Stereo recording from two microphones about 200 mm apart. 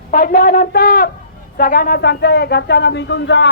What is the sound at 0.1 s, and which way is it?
Speech, 45° left (ahead or behind).